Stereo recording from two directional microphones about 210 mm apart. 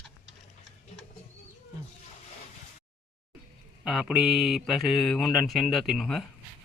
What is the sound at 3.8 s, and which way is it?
Speech, centre (ahead or behind).